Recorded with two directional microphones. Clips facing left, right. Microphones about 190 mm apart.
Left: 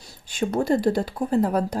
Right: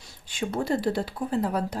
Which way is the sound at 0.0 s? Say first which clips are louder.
Left 5 dB; 40° left (ahead or behind).